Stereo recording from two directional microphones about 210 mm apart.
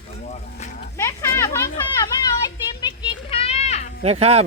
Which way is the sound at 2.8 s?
25° left (ahead or behind).